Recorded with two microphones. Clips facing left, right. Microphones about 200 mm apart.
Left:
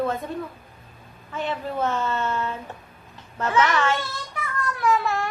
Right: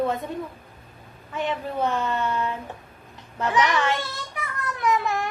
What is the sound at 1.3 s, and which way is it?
A woman's voice, 15° right (ahead or behind).